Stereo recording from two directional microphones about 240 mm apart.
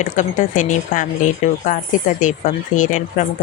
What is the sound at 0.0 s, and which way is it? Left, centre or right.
Speech, left.